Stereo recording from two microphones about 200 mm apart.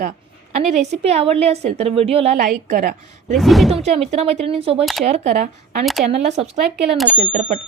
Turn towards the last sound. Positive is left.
turn(degrees=-35)  # may be behind; listen again after turning